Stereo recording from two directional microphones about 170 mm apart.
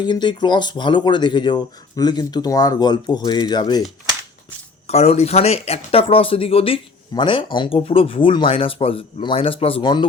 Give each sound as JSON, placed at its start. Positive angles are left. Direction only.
{"t": 0.0, "sound": "speech", "side_deg": 25}
{"t": 4.9, "sound": "speech", "side_deg": 40}